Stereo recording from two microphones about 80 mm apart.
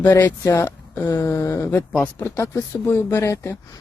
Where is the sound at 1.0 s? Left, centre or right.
Left.